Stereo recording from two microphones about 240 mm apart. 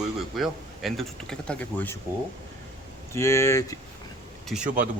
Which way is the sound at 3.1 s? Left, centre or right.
Centre.